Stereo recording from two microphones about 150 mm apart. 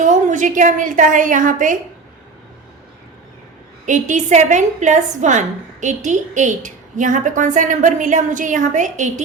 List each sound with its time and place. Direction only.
0.0 s a woman's voice: 55° right (ahead or behind)
3.8 s a woman's voice: 55° right (ahead or behind)